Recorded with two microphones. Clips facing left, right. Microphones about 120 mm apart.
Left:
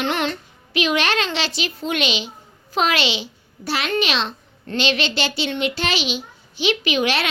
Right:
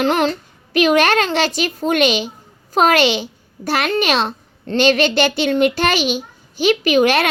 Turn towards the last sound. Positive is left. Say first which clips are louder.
# right 7 dB
turn(degrees=-50)  # may be behind; listen again after turning